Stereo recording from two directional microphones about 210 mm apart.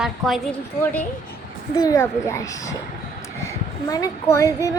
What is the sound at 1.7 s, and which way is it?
A woman's voice, 15° left (ahead or behind).